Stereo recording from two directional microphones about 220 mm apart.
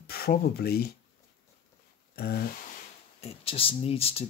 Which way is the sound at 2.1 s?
45° left (ahead or behind).